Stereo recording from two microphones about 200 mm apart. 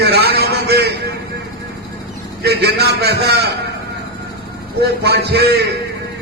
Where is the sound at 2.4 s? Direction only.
55° right (ahead or behind).